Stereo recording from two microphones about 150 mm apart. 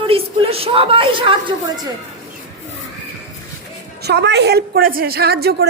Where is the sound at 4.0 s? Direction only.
90° right.